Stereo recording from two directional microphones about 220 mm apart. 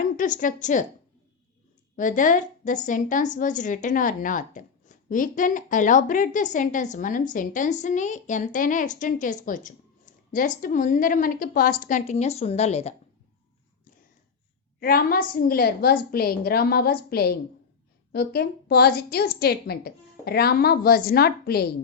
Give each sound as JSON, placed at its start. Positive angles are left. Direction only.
{"t": 0.2, "sound": "a woman's voice", "side_deg": 35}
{"t": 2.0, "sound": "a woman's voice", "side_deg": 35}
{"t": 14.8, "sound": "a woman's voice", "side_deg": 40}